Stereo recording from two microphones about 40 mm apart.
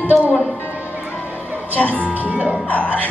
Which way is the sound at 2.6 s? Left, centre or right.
Left.